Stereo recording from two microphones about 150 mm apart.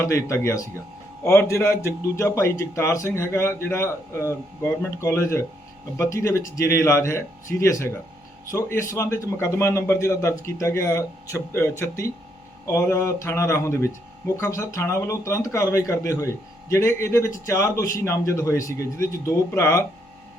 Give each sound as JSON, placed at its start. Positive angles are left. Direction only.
{"t": 0.0, "sound": "a man's voice", "side_deg": 20}